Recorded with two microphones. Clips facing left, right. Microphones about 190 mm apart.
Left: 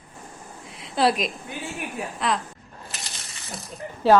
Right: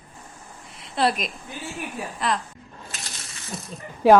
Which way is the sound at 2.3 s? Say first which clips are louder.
Even; centre (ahead or behind).